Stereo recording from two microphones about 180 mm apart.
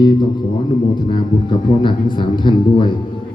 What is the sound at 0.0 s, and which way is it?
A man's voice, 25° left (ahead or behind).